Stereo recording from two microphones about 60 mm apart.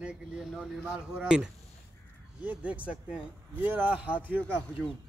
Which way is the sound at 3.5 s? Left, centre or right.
Right.